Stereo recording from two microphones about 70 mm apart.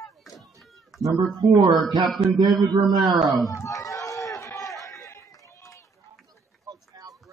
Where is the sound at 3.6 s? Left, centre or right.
Left.